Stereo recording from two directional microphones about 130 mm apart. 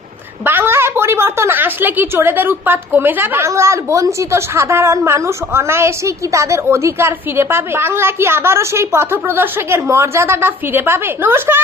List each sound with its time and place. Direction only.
0.4 s a woman's voice: 15° right (ahead or behind)